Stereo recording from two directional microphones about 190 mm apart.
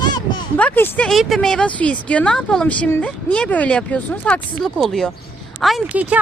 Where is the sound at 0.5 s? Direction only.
10° left (ahead or behind).